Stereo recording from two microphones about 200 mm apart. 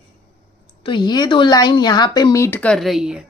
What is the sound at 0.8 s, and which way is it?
A woman's voice, 20° left (ahead or behind).